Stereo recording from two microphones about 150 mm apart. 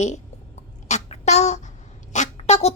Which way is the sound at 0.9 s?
45° left (ahead or behind).